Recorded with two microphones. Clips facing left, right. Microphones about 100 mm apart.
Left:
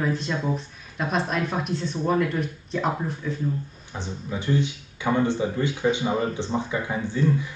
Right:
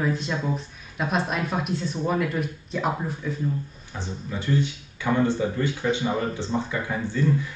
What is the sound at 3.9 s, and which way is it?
Speech, 15° left (ahead or behind).